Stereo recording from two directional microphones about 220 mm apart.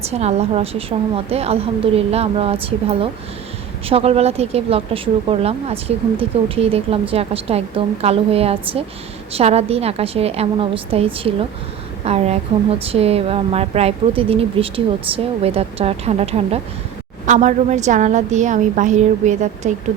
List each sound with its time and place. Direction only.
0.0 s a woman's voice: 30° right (ahead or behind)